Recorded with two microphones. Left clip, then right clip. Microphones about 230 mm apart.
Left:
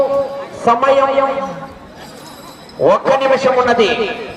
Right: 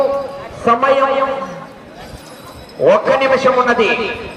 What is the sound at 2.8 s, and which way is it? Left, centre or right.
A man's voice, left.